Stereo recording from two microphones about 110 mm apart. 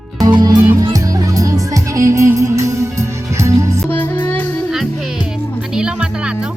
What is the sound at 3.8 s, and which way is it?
Music, 15° left (ahead or behind).